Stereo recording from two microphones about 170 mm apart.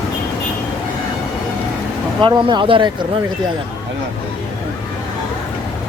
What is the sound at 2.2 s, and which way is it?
Speech, 25° right (ahead or behind).